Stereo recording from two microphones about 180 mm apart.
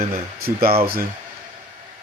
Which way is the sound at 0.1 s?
55° right (ahead or behind).